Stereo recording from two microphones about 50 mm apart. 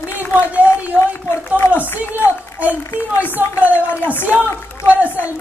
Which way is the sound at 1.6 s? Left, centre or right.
Left.